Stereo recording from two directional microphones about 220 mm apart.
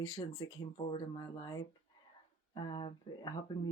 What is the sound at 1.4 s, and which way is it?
Speech, 20° left (ahead or behind).